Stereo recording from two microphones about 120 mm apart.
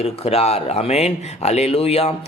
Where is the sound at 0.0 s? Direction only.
60° left (ahead or behind).